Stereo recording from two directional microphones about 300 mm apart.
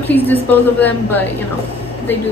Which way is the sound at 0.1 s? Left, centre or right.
Centre.